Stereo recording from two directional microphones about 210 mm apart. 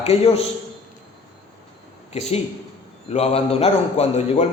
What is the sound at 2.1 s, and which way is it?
A man's voice, 30° left (ahead or behind).